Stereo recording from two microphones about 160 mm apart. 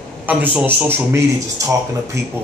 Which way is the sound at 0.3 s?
10° right (ahead or behind).